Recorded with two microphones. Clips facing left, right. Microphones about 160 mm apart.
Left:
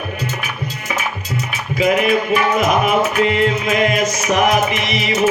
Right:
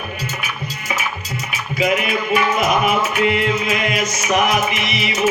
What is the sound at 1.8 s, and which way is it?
Music, 40° left (ahead or behind).